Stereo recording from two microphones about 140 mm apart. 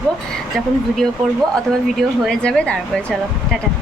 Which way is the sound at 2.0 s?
5° left (ahead or behind).